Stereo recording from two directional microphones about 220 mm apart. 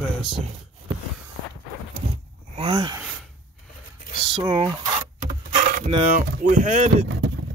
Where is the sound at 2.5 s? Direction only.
25° right (ahead or behind).